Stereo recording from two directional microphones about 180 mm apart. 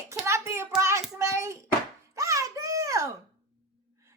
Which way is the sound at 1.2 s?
15° right (ahead or behind).